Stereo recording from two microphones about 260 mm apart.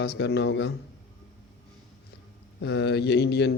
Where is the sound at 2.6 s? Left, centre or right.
Left.